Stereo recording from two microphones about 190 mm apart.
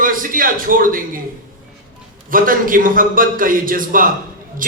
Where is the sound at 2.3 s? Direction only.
45° right (ahead or behind).